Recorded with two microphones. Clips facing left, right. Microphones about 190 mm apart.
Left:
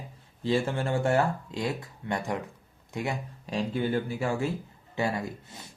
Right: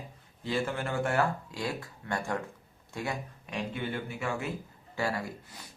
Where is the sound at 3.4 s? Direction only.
35° left (ahead or behind).